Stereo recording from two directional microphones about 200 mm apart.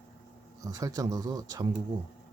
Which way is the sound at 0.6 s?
15° right (ahead or behind).